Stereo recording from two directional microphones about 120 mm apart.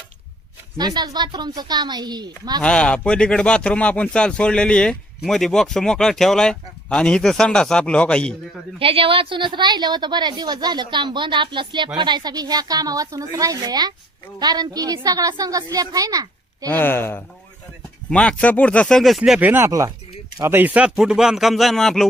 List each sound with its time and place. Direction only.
0.8 s a woman's voice: 35° right (ahead or behind)
2.6 s speech: 10° left (ahead or behind)
8.8 s a woman's voice: 50° right (ahead or behind); by 16.6 s 30° right (ahead or behind)
16.6 s speech: 15° left (ahead or behind)
18.1 s speech: 10° left (ahead or behind)